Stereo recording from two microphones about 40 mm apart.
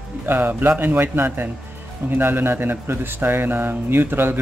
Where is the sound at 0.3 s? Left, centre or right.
Right.